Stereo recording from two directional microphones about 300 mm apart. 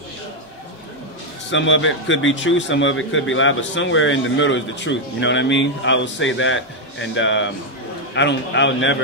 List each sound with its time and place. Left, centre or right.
1.5 s a man's voice: left